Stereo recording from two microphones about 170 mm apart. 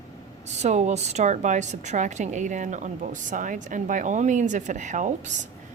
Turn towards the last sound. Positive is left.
turn(degrees=-45)  # may be behind; listen again after turning